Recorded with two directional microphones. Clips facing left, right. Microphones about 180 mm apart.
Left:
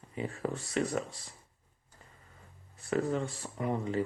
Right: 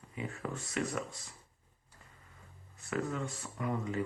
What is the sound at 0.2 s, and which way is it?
Speech, 30° left (ahead or behind).